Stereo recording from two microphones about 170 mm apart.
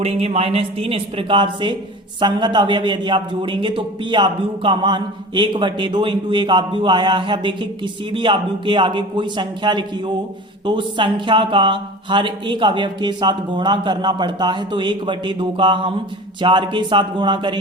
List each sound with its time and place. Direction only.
0.0 s a man's voice: 35° right (ahead or behind)